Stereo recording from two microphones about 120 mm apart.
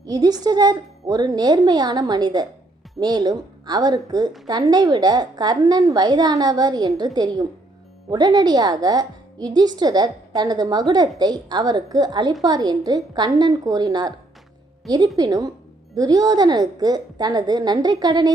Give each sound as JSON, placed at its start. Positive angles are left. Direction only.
{"t": 0.0, "sound": "a woman's voice", "side_deg": -35}